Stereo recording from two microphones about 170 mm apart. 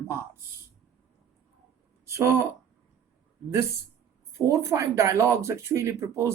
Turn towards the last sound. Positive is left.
turn(degrees=-20)  # may be behind; listen again after turning